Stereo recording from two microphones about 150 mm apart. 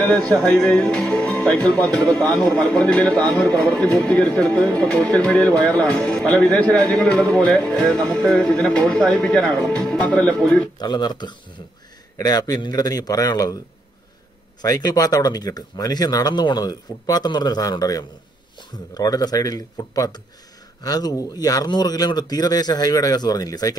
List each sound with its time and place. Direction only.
0.0 s speech: 10° left (ahead or behind)
10.8 s speech: 30° left (ahead or behind)
14.6 s speech: 25° left (ahead or behind)